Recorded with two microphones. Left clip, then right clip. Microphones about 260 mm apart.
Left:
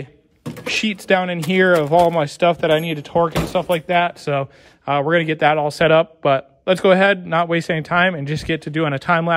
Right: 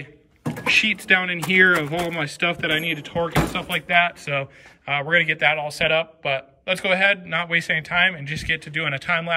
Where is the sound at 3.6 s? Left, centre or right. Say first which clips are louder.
Left 4 dB; centre.